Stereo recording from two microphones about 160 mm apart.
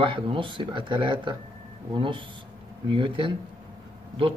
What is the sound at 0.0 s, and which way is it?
Speech, 30° right (ahead or behind).